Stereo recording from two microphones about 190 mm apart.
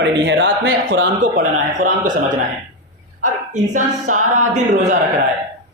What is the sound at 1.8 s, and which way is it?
Speech, 45° right (ahead or behind).